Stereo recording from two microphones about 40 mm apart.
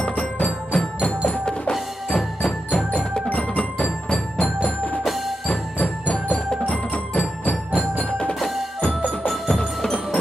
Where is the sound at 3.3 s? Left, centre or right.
Left.